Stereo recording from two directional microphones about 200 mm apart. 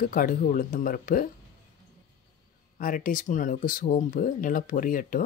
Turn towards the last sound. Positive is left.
turn(degrees=45)  # may be behind; listen again after turning